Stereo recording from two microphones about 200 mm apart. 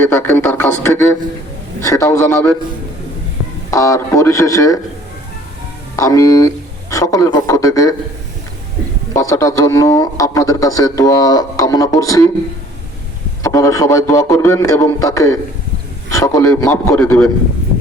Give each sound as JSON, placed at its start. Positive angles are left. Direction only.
{"t": 0.0, "sound": "speech", "side_deg": 10}
{"t": 3.7, "sound": "speech", "side_deg": 15}
{"t": 6.0, "sound": "speech", "side_deg": 15}
{"t": 9.1, "sound": "speech", "side_deg": 15}
{"t": 13.4, "sound": "speech", "side_deg": 15}